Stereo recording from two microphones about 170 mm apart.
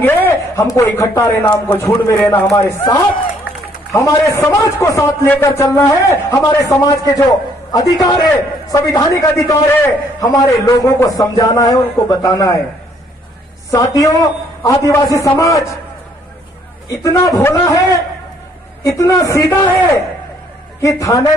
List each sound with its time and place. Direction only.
0.0 s a man's voice: 10° left (ahead or behind)
13.7 s a man's voice: 20° left (ahead or behind)
16.9 s a man's voice: 20° left (ahead or behind)
20.8 s a man's voice: 20° left (ahead or behind)